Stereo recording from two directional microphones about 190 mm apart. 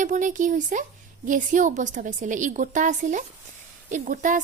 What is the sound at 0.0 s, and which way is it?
Speech, 40° right (ahead or behind).